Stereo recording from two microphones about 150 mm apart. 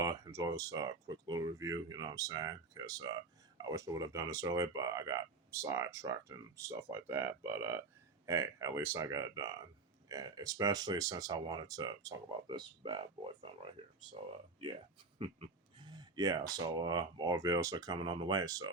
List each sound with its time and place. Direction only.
0.0 s speech: 20° right (ahead or behind)
15.2 s speech: 35° right (ahead or behind)